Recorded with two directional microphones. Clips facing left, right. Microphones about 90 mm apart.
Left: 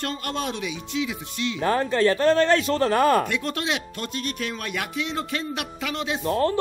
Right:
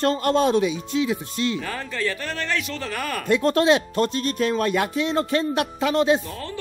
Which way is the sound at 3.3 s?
35° right (ahead or behind).